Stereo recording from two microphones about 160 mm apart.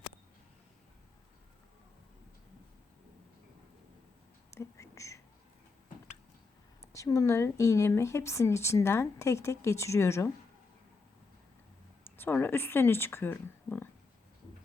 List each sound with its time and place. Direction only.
4.5 s whispering: 20° left (ahead or behind)
6.9 s speech: 20° left (ahead or behind)
12.1 s speech: 15° left (ahead or behind)